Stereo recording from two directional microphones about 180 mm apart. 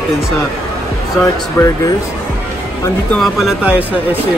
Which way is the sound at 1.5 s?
20° left (ahead or behind).